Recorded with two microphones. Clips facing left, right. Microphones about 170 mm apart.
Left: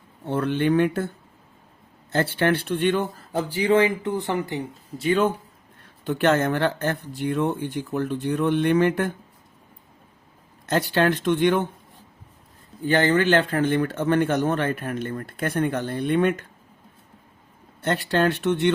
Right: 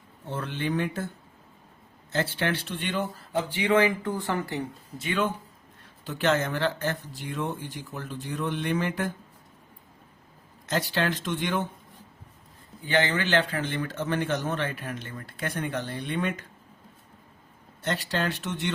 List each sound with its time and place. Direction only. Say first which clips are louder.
0.3 s speech: left 9 dB; 60° left (ahead or behind)
2.1 s speech: left 6 dB; 55° left (ahead or behind)
3.5 s speech: left 4 dB; 35° left (ahead or behind)
4.9 s speech: left 7 dB; 40° left (ahead or behind)
6.1 s speech: left 5 dB; 55° left (ahead or behind)
10.7 s speech: left 6 dB; 55° left (ahead or behind)
12.8 s speech: left 6 dB; 45° left (ahead or behind)
17.8 s speech: left 7 dB; 55° left (ahead or behind)